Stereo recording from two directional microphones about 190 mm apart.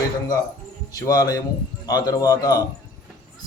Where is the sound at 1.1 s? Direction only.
20° left (ahead or behind).